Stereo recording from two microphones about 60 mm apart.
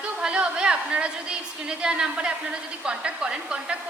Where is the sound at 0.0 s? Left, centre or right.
Centre.